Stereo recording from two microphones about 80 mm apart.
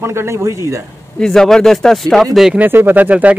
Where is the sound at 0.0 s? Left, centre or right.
Right.